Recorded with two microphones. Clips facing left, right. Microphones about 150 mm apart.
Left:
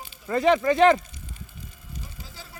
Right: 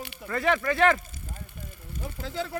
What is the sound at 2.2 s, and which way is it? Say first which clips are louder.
Speech: right 14 dB; 70° right (ahead or behind).